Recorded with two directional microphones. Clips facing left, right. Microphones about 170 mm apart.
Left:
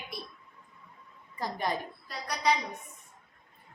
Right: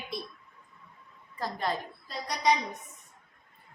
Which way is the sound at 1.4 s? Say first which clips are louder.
Even; 15° left (ahead or behind).